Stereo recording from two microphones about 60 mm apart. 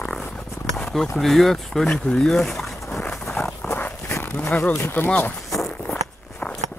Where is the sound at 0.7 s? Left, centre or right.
Centre.